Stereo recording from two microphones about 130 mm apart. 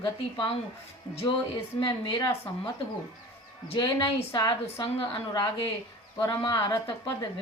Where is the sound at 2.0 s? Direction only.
30° left (ahead or behind).